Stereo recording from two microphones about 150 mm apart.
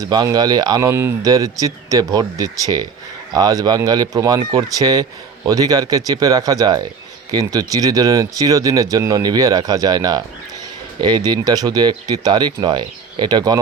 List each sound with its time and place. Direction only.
0.0 s speech: 25° right (ahead or behind)